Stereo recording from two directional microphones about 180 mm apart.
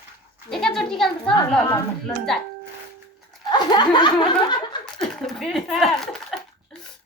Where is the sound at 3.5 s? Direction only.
25° left (ahead or behind).